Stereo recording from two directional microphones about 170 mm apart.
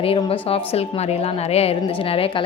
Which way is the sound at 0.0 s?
35° left (ahead or behind).